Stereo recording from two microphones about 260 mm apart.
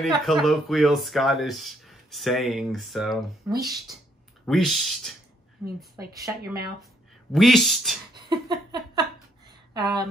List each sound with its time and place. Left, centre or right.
0.0 s speech: centre
3.5 s speech: centre
4.5 s speech: centre
7.3 s speech: centre
8.3 s a sound: centre
9.8 s speech: centre